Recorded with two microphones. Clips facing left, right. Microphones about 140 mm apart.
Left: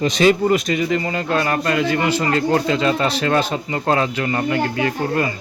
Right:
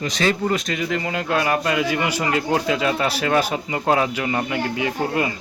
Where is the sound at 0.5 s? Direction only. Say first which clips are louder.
Left 5 dB; centre (ahead or behind).